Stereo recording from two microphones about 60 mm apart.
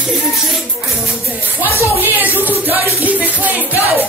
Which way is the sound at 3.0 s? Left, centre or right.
Right.